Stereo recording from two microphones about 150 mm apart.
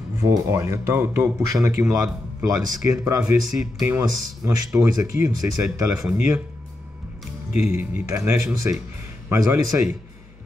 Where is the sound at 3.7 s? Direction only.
15° right (ahead or behind).